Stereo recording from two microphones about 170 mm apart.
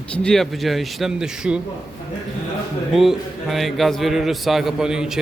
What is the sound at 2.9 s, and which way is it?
A man's voice, centre (ahead or behind).